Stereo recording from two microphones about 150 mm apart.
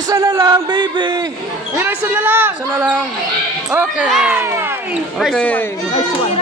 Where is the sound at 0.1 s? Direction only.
20° right (ahead or behind).